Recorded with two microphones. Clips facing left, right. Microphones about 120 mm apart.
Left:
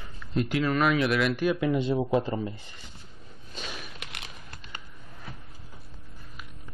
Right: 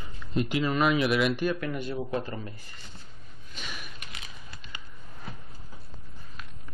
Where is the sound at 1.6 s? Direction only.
25° left (ahead or behind).